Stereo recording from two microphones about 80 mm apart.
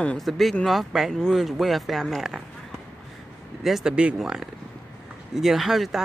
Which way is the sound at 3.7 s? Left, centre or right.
Centre.